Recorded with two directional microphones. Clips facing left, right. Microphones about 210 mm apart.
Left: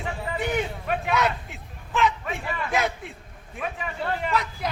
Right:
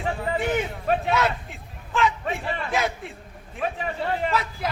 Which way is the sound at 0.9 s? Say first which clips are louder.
Right 7 dB; 30° right (ahead or behind).